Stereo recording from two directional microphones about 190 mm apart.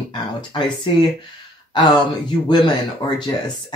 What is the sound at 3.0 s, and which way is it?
Speech, 25° left (ahead or behind).